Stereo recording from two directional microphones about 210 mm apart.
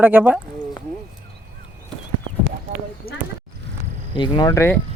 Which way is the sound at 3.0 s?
45° left (ahead or behind).